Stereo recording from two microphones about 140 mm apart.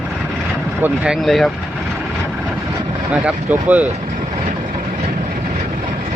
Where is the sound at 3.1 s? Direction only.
10° right (ahead or behind).